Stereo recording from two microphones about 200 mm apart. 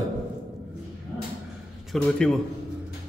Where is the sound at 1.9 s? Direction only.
5° left (ahead or behind).